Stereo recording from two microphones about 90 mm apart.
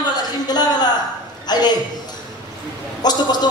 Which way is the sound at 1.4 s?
50° left (ahead or behind).